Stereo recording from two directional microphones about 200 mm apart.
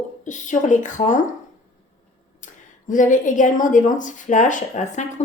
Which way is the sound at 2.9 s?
40° left (ahead or behind).